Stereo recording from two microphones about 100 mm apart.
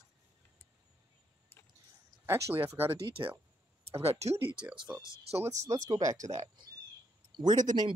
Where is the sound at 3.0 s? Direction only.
60° right (ahead or behind).